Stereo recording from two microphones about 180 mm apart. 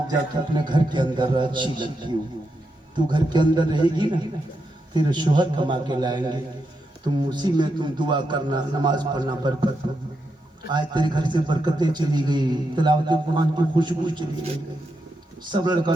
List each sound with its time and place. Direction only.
0.1 s a man's voice: 25° right (ahead or behind)
10.7 s a man's voice: 25° right (ahead or behind)
15.4 s a man's voice: 25° right (ahead or behind)